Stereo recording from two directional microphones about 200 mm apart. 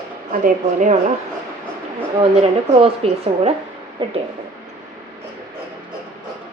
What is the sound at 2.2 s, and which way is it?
Speech, 30° right (ahead or behind).